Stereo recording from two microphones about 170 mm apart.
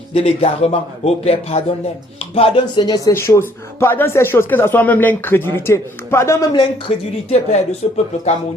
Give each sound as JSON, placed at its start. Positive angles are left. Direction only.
{"t": 0.1, "sound": "a man's voice", "side_deg": 35}